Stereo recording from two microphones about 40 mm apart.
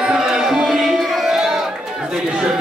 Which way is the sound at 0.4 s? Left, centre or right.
Centre.